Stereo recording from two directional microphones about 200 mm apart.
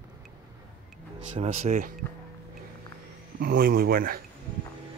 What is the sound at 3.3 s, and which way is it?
Speech, 45° right (ahead or behind).